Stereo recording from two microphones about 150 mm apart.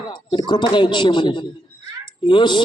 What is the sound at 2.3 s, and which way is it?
Speech, 30° left (ahead or behind).